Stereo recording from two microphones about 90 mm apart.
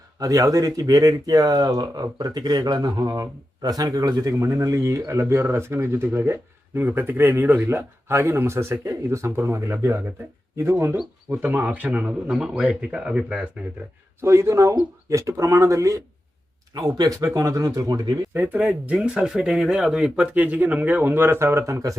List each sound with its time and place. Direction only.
0.2 s speech: 40° right (ahead or behind); by 13.5 s 10° right (ahead or behind)
14.2 s speech: 30° right (ahead or behind); by 18.2 s 45° right (ahead or behind)
18.3 s speech: 20° right (ahead or behind); by 21.9 s 35° right (ahead or behind)